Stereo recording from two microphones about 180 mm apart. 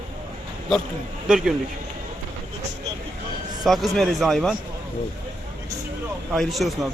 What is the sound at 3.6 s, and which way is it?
Speech, centre (ahead or behind).